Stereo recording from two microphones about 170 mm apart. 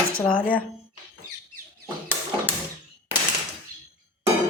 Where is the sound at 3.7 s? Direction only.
55° right (ahead or behind).